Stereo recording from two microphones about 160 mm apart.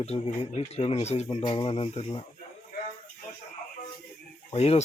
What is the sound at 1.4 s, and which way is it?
Speech, 30° left (ahead or behind).